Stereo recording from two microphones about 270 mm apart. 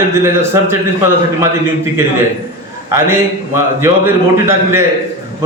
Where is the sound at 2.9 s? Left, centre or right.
Centre.